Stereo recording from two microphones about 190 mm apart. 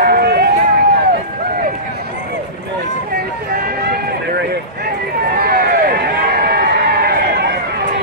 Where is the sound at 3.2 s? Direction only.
55° right (ahead or behind).